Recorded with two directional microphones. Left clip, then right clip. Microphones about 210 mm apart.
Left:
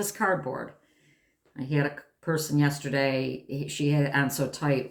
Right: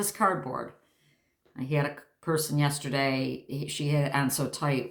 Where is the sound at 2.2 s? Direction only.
35° right (ahead or behind).